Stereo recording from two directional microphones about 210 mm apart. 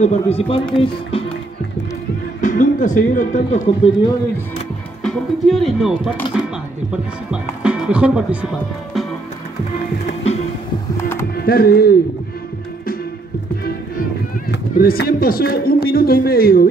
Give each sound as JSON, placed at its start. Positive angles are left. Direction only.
{"t": 0.0, "sound": "speech", "side_deg": 30}
{"t": 1.1, "sound": "music", "side_deg": 25}
{"t": 2.4, "sound": "speech", "side_deg": 40}
{"t": 5.0, "sound": "speech", "side_deg": 0}
{"t": 7.2, "sound": "speech", "side_deg": -5}
{"t": 11.3, "sound": "speech", "side_deg": 45}
{"t": 14.5, "sound": "speech", "side_deg": 45}